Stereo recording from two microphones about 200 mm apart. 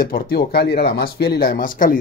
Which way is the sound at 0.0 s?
50° left (ahead or behind).